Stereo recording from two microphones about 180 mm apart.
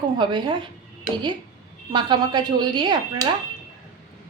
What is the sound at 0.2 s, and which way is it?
A woman's voice, 25° right (ahead or behind).